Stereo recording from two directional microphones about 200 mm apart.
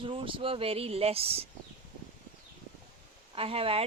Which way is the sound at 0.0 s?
25° right (ahead or behind).